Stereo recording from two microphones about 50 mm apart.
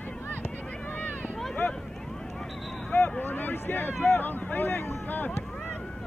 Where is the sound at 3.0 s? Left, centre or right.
Left.